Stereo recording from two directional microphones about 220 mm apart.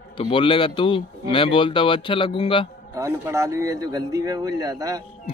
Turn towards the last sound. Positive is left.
turn(degrees=-15)  # may be behind; listen again after turning